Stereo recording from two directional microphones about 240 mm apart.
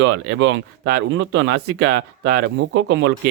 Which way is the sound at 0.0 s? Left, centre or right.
Right.